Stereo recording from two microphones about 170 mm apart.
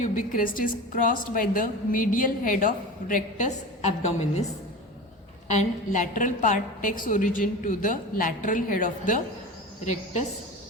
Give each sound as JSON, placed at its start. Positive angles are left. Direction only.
{"t": 0.0, "sound": "a woman's voice", "side_deg": 50}
{"t": 5.5, "sound": "a woman's voice", "side_deg": 45}